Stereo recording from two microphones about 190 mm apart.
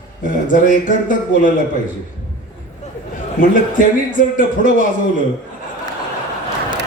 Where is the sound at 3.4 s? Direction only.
45° left (ahead or behind).